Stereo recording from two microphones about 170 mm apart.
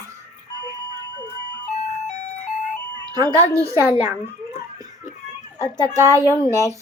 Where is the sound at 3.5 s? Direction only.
15° right (ahead or behind).